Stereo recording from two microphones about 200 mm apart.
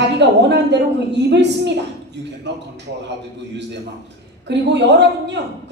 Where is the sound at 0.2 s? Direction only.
60° right (ahead or behind).